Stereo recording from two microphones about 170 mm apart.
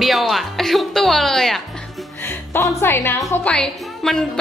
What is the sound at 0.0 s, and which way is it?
Music, centre (ahead or behind).